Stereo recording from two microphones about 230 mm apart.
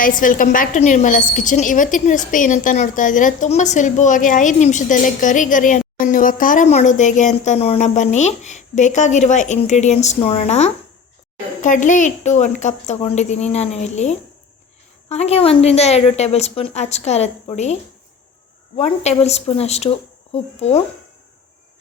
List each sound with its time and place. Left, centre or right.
0.0 s a woman's voice: left
18.8 s a woman's voice: left